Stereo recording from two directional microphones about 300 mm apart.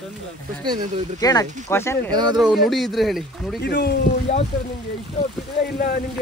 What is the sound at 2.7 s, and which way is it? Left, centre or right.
Speech, centre.